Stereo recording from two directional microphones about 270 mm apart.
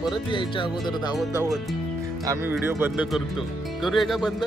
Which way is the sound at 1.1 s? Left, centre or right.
Centre.